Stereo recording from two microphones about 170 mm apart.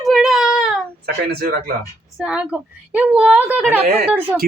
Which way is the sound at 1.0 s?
65° right (ahead or behind).